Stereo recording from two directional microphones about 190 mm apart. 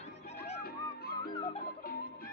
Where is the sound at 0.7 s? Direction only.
55° left (ahead or behind).